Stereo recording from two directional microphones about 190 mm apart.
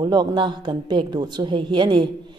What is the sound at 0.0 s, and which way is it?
A woman's voice, 20° right (ahead or behind).